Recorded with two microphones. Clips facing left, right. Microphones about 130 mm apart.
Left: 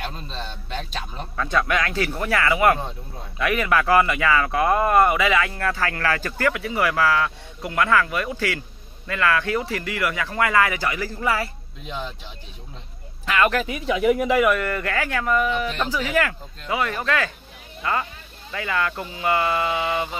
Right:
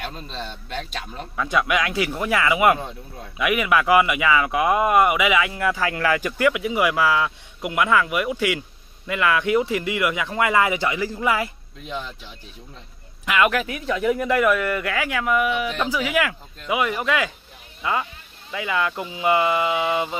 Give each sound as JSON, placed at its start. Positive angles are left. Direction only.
{"t": 1.3, "sound": "speech", "side_deg": -10}
{"t": 13.2, "sound": "speech", "side_deg": -15}
{"t": 14.5, "sound": "speech", "side_deg": -5}